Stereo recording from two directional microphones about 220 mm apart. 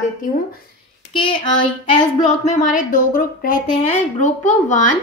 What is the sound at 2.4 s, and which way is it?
A woman's voice, 35° left (ahead or behind).